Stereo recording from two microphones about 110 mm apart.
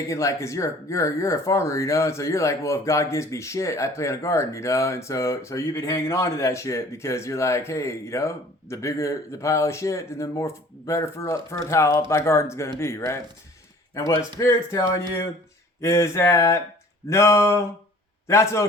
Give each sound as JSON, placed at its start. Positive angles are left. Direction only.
{"t": 0.1, "sound": "speech", "side_deg": 30}